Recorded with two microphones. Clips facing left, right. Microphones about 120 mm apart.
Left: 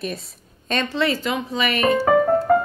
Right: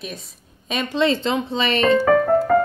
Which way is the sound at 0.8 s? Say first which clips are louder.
Right 5 dB; 20° right (ahead or behind).